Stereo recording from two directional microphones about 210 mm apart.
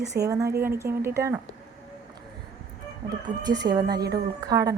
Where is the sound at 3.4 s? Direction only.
20° right (ahead or behind).